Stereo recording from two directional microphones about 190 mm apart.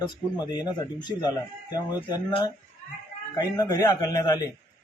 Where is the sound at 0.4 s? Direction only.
20° left (ahead or behind).